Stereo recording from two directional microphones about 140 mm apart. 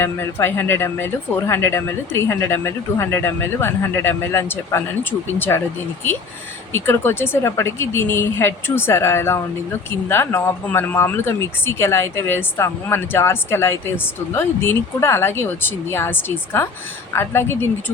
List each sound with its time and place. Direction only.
0.0 s speech: 15° left (ahead or behind)
6.7 s speech: 15° left (ahead or behind)